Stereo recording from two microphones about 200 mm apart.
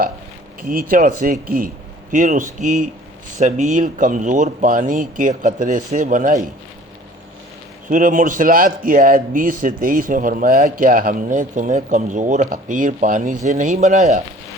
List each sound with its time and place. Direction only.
0.7 s a man's voice: 45° right (ahead or behind)
7.9 s a man's voice: 40° right (ahead or behind)